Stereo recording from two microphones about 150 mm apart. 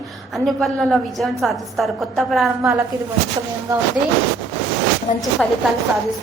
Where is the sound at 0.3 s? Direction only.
Centre (ahead or behind).